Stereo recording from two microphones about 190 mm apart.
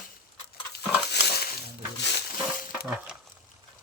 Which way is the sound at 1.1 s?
60° left (ahead or behind).